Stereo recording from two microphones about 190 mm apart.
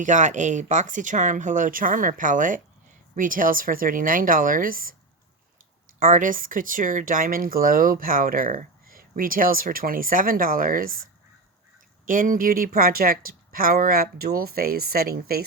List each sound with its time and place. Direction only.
0.0 s speech: 40° right (ahead or behind)
6.0 s speech: 45° right (ahead or behind)
12.0 s speech: 45° right (ahead or behind)